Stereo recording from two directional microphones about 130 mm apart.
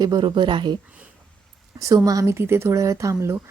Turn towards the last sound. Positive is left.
turn(degrees=-25)  # may be behind; listen again after turning